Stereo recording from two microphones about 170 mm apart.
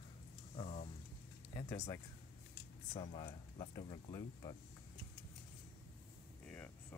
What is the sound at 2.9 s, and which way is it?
Speech, 30° left (ahead or behind).